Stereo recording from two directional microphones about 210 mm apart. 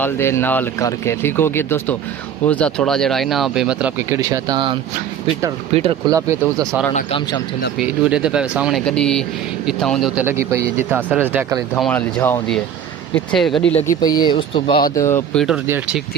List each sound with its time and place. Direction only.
0.0 s speech: 10° left (ahead or behind); by 6.7 s 15° right (ahead or behind)
7.8 s speech: 5° right (ahead or behind)
10.2 s speech: 15° right (ahead or behind)
11.7 s speech: 5° left (ahead or behind)
13.8 s speech: 20° left (ahead or behind)
14.9 s speech: 10° left (ahead or behind); by 16.0 s 10° right (ahead or behind)